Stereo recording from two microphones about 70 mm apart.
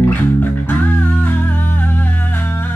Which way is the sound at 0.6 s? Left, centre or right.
Left.